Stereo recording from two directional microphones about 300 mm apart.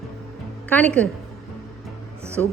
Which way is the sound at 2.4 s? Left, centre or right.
Centre.